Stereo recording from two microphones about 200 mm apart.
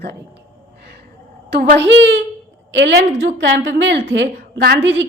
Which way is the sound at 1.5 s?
55° right (ahead or behind).